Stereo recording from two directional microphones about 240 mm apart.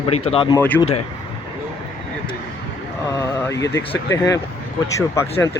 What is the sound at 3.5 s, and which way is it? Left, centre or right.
Speech, centre.